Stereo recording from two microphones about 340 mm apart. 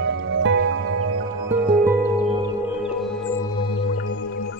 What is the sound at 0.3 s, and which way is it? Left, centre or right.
Music, right.